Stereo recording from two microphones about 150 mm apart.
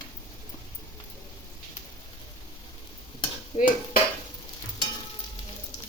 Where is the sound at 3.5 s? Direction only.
40° left (ahead or behind).